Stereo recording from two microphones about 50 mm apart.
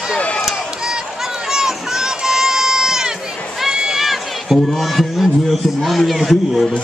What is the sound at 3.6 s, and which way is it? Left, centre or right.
Run, centre.